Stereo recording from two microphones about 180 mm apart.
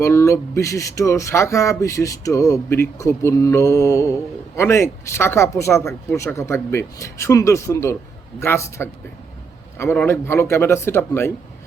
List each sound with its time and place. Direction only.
0.0 s speech: 15° left (ahead or behind)